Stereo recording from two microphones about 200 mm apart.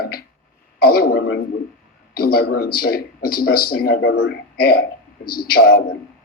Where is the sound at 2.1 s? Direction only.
50° left (ahead or behind).